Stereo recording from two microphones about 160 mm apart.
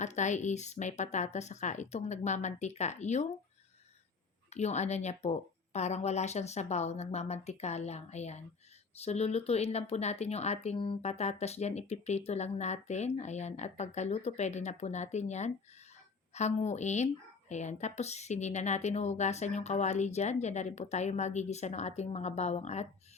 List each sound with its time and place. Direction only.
0.0 s speech: 50° left (ahead or behind)
4.4 s speech: 45° left (ahead or behind)